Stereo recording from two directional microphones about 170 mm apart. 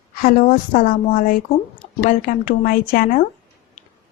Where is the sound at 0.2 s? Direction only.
55° left (ahead or behind).